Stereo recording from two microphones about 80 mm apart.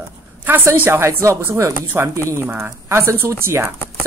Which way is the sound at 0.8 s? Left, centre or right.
Right.